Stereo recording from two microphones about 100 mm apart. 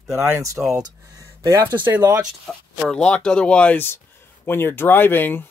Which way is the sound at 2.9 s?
10° left (ahead or behind).